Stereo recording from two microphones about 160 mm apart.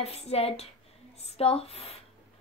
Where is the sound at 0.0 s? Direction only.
40° left (ahead or behind).